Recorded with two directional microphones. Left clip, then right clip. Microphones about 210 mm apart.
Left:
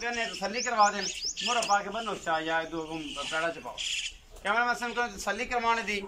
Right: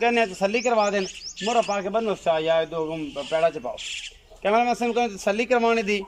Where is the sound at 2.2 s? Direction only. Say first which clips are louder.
Right 7 dB; 55° right (ahead or behind).